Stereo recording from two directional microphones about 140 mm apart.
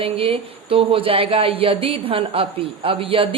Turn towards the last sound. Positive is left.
turn(degrees=-40)  # may be behind; listen again after turning